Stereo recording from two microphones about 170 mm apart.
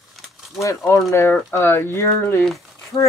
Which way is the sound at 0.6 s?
15° left (ahead or behind).